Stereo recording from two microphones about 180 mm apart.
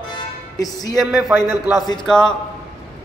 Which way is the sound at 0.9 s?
Centre (ahead or behind).